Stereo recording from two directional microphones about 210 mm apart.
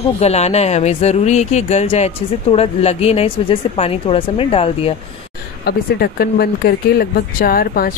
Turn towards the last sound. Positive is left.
turn(degrees=45)  # may be behind; listen again after turning